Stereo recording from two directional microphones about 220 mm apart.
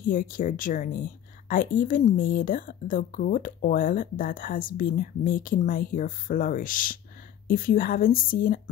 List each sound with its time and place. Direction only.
0.0 s speech: 40° left (ahead or behind)